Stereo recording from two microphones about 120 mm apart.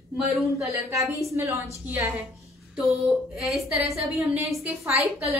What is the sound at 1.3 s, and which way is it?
Speech, 25° right (ahead or behind).